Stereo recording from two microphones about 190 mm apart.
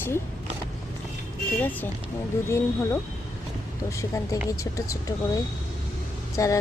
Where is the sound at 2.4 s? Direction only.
15° left (ahead or behind).